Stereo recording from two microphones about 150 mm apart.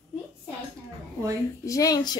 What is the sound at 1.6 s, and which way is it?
Speech, 25° left (ahead or behind).